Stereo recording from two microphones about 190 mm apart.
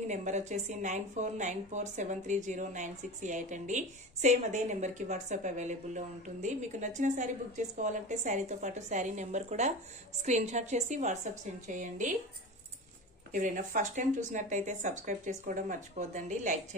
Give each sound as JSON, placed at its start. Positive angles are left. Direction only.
{"t": 0.1, "sound": "a woman's voice", "side_deg": -40}
{"t": 13.3, "sound": "a woman's voice", "side_deg": -40}